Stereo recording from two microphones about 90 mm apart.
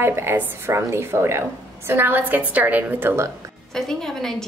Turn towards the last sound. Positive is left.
turn(degrees=5)  # may be behind; listen again after turning